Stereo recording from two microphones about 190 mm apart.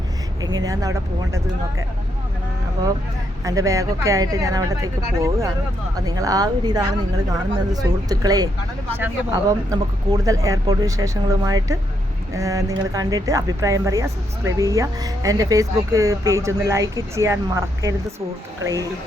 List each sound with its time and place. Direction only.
0.4 s speech: 20° right (ahead or behind)
3.4 s speech: 15° right (ahead or behind)